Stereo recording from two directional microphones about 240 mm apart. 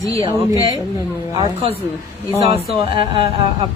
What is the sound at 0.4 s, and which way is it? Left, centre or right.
Speech, centre.